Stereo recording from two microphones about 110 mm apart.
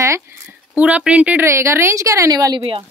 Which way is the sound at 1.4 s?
25° right (ahead or behind).